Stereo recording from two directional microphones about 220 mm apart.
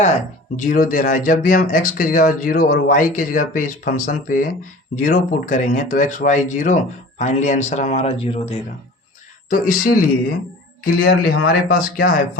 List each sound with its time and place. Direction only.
0.5 s speech: 40° left (ahead or behind)
9.5 s speech: 40° left (ahead or behind)